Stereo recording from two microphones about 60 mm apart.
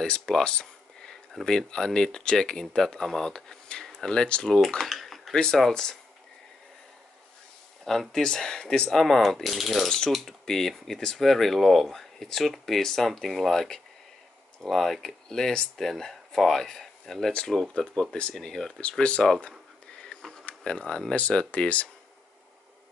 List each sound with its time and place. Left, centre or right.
0.0 s speech: centre
7.8 s speech: centre
9.8 s speech: centre
18.1 s speech: centre
20.0 s sniff: centre
20.6 s speech: centre